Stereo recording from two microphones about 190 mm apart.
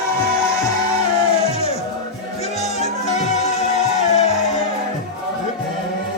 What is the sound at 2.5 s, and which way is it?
Music, 35° left (ahead or behind).